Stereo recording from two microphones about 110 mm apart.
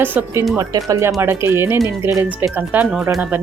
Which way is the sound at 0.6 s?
35° right (ahead or behind).